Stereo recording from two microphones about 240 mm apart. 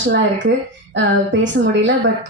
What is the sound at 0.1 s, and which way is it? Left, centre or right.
Speech, right.